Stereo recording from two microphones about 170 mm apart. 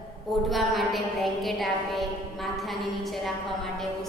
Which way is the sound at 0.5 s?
Centre (ahead or behind).